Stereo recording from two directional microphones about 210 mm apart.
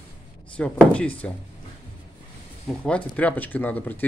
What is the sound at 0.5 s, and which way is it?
Speech, 5° left (ahead or behind).